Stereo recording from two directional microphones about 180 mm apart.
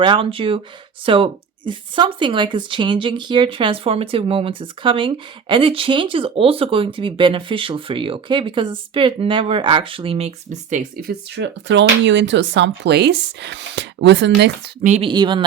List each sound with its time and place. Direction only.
0.0 s speech: 30° right (ahead or behind); by 11.1 s 45° right (ahead or behind)
11.3 s speech: 75° right (ahead or behind)
14.8 s speech: 40° right (ahead or behind)
15.1 s speech: 25° right (ahead or behind)